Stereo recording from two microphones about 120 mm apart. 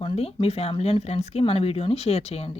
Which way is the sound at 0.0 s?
50° left (ahead or behind).